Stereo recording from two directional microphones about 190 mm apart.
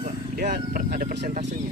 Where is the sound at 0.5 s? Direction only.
50° right (ahead or behind).